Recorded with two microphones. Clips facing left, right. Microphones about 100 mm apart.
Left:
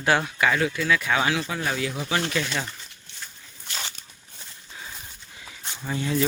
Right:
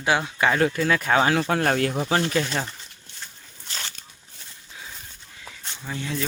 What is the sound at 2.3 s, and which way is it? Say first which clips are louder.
Speech: right 3 dB; 35° right (ahead or behind).